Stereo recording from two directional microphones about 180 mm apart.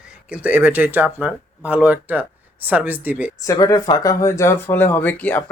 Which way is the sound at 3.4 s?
20° left (ahead or behind).